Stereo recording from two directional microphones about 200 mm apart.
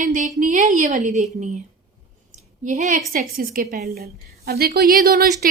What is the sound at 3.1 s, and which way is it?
A woman's voice, 45° right (ahead or behind).